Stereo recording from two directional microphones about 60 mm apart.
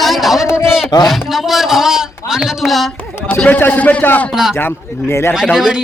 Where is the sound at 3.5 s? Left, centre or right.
Left.